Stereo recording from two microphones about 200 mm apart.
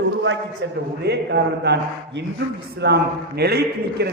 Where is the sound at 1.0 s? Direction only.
60° right (ahead or behind).